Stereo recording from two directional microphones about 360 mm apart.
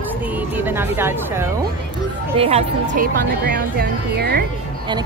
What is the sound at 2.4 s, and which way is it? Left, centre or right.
Speech, centre.